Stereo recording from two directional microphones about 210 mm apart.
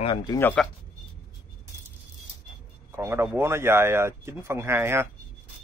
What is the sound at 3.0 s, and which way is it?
Speech, 10° right (ahead or behind).